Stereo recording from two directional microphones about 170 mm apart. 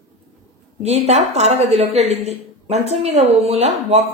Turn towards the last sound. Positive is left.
turn(degrees=-40)  # may be behind; listen again after turning